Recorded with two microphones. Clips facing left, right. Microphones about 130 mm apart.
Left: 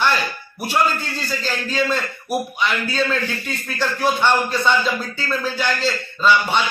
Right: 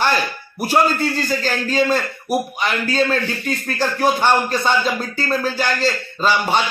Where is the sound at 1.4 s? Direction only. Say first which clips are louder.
Right 2 dB; 45° right (ahead or behind).